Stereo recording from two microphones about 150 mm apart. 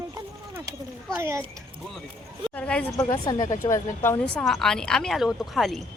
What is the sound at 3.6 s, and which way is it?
Speech, 20° left (ahead or behind).